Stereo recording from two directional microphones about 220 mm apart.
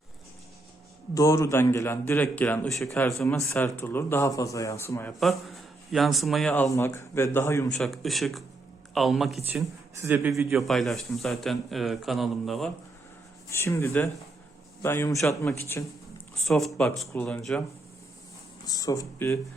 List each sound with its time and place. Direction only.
1.1 s a man's voice: 15° left (ahead or behind)
3.2 s a man's voice: 10° left (ahead or behind)
5.2 s speech: centre (ahead or behind)
7.7 s speech: centre (ahead or behind)
13.5 s a man's voice: 10° left (ahead or behind)
16.3 s speech: centre (ahead or behind)
18.6 s a man's voice: 15° left (ahead or behind)